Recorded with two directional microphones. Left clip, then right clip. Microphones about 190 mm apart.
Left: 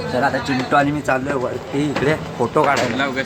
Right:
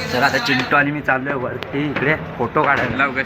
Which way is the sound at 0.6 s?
5° left (ahead or behind).